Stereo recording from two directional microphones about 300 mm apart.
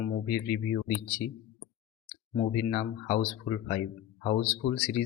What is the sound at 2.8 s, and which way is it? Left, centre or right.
Speech, left.